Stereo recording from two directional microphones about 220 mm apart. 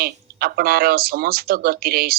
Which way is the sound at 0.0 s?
45° right (ahead or behind).